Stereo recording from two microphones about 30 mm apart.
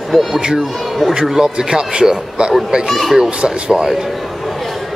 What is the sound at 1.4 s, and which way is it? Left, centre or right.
Speech, right.